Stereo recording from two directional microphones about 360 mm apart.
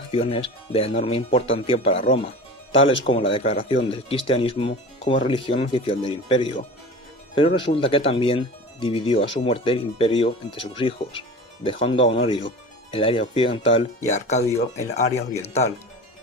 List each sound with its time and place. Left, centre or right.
0.1 s speech: centre